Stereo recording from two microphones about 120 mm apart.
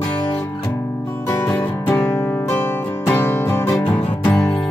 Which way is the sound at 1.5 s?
15° left (ahead or behind).